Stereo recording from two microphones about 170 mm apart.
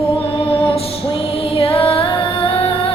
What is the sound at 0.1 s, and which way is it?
Music, 30° left (ahead or behind).